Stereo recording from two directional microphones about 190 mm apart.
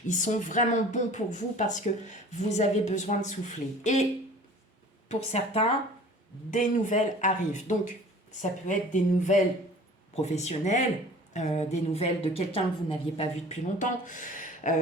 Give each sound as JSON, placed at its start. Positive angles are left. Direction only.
{"t": 0.1, "sound": "a woman's voice", "side_deg": 40}
{"t": 5.0, "sound": "a woman's voice", "side_deg": 35}